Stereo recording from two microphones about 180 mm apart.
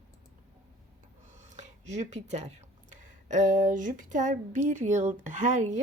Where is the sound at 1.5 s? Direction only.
40° right (ahead or behind).